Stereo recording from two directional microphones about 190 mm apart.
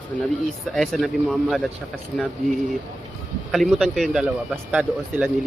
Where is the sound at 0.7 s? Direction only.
Centre (ahead or behind).